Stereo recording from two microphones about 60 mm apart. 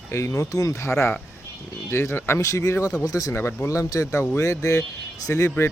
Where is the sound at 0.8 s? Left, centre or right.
Left.